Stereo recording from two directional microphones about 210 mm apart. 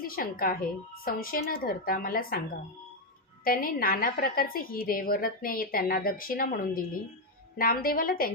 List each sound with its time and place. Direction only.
0.0 s a woman's voice: 45° left (ahead or behind)
3.4 s a woman's voice: 45° left (ahead or behind)